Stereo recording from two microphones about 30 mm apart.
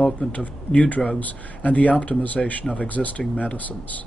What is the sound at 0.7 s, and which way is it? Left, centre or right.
Speech, left.